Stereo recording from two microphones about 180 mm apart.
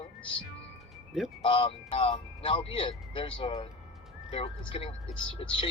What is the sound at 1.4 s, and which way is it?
Speech, 30° left (ahead or behind).